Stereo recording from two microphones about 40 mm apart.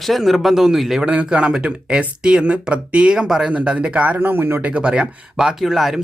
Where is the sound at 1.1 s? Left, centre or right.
Right.